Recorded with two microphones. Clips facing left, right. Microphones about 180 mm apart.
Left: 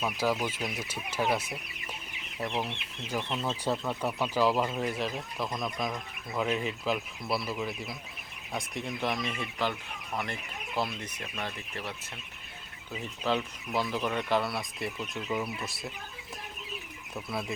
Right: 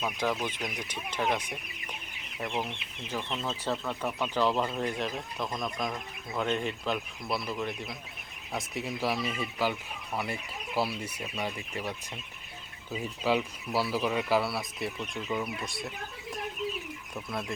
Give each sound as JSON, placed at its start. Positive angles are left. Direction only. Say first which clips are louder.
{"t": 0.0, "sound": "speech", "louder": "left 1 dB", "side_deg": 5}
{"t": 10.8, "sound": "speech", "louder": "right 2 dB", "side_deg": -5}
{"t": 13.0, "sound": "speech", "louder": "right 2 dB", "side_deg": -10}
{"t": 17.2, "sound": "speech", "louder": "left 1 dB", "side_deg": 5}